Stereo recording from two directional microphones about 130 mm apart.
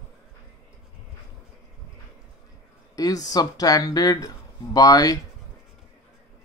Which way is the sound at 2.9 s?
25° left (ahead or behind).